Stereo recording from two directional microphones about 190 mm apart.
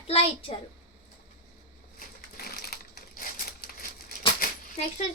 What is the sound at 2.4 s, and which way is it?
Crumpling, 55° left (ahead or behind).